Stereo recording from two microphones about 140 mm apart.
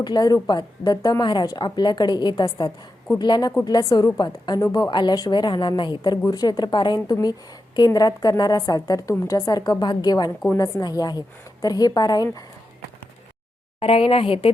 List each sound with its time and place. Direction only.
0.0 s a woman's voice: 30° left (ahead or behind)
13.7 s speech: 45° left (ahead or behind)